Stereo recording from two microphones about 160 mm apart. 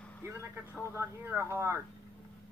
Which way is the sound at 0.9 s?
15° right (ahead or behind).